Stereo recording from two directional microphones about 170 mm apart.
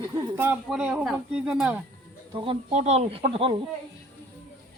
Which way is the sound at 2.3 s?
30° right (ahead or behind).